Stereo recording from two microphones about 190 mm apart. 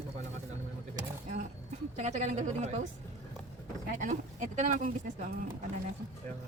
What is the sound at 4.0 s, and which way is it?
Speech, 40° right (ahead or behind).